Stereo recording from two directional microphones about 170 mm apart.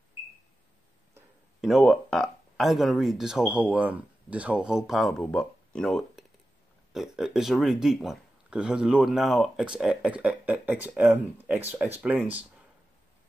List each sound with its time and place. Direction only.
1.6 s speech: centre (ahead or behind)